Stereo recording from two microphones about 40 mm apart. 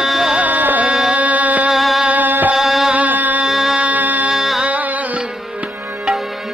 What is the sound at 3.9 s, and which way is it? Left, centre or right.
Music, right.